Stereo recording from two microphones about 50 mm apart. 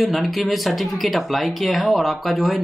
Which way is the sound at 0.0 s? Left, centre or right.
Centre.